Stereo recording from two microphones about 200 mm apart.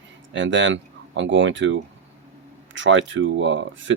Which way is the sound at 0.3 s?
70° right (ahead or behind).